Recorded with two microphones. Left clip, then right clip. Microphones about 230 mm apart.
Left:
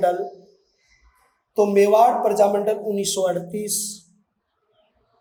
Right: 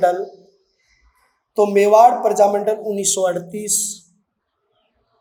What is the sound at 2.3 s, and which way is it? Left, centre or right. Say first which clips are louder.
Speech: right 3 dB; right.